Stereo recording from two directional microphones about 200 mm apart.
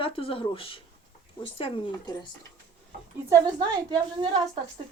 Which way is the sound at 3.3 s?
20° right (ahead or behind).